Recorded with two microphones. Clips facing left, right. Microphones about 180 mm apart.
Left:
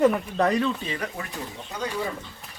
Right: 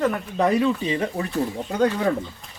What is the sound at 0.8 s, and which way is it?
Speech, 25° right (ahead or behind).